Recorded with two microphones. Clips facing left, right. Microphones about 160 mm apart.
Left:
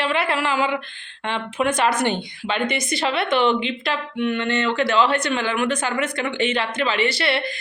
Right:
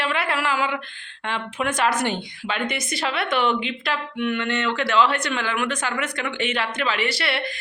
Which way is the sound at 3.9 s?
30° left (ahead or behind).